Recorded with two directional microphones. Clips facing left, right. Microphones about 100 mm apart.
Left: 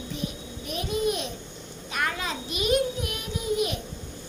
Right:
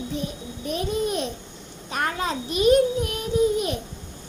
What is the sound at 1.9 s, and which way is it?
A child's voice, 35° right (ahead or behind).